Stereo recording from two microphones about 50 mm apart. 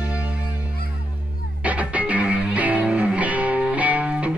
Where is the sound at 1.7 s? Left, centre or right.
Right.